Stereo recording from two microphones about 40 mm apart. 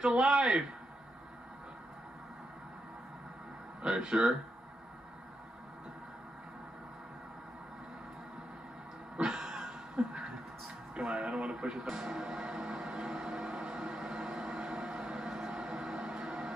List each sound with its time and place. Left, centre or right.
0.0 s speech: centre
3.8 s speech: centre
9.1 s a sound: right
11.0 s speech: right
11.9 s music: right